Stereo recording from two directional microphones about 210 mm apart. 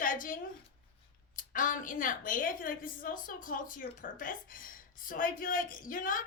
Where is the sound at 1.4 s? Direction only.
40° left (ahead or behind).